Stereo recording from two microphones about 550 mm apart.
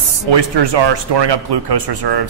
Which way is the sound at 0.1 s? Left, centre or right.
Right.